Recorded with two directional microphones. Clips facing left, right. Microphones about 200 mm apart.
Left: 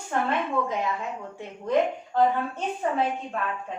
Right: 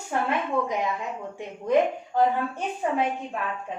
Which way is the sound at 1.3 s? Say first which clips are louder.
Right 2 dB; 15° right (ahead or behind).